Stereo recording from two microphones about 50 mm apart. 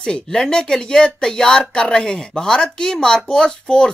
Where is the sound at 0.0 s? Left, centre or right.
Centre.